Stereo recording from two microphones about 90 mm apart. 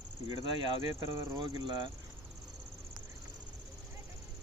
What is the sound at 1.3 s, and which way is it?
Speech, 55° right (ahead or behind).